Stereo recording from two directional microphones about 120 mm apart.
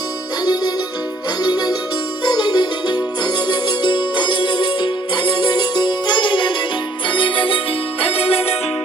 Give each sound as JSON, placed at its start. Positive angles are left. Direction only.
{"t": 0.4, "sound": "music", "side_deg": 35}